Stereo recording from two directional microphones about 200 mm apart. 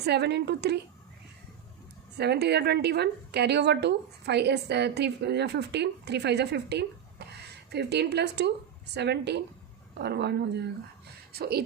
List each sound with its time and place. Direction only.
0.0 s a woman's voice: 55° right (ahead or behind)
2.1 s a woman's voice: 55° right (ahead or behind)